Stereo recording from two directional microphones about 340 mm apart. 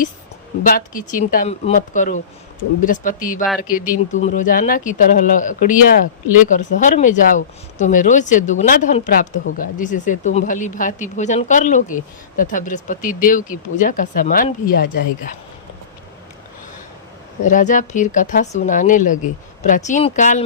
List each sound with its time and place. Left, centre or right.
0.6 s speech: left
17.4 s speech: left